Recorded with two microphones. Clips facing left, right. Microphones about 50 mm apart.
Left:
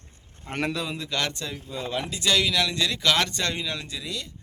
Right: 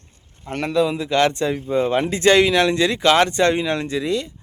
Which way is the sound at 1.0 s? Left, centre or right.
Right.